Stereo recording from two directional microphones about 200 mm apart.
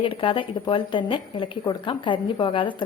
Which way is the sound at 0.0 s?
25° left (ahead or behind).